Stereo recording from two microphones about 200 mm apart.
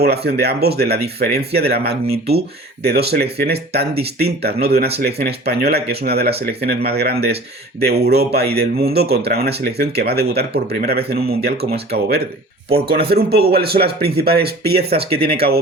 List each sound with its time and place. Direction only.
0.0 s speech: 55° right (ahead or behind)